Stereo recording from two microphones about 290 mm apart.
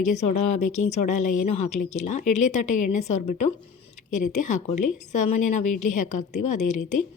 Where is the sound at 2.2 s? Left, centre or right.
Left.